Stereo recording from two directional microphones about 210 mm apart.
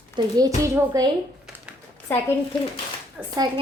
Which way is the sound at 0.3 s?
15° right (ahead or behind).